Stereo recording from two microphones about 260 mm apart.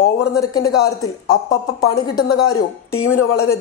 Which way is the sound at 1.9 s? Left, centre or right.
Left.